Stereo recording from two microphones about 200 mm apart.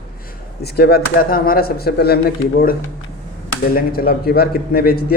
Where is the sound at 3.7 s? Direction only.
50° left (ahead or behind).